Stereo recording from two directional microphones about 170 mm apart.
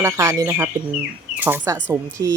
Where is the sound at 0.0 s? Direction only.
20° right (ahead or behind).